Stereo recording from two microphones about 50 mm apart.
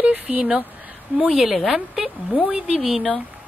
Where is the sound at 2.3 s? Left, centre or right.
Right.